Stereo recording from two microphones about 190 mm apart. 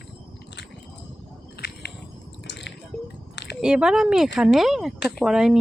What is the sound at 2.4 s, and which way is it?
Squish, 65° left (ahead or behind).